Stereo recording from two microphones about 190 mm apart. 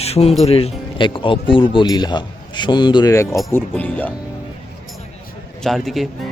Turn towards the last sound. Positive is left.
turn(degrees=0)  # may be behind; listen again after turning